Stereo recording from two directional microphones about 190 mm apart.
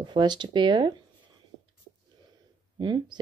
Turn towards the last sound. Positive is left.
turn(degrees=-25)  # may be behind; listen again after turning